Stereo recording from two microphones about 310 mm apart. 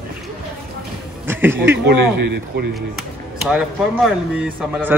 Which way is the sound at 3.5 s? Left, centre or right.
Centre.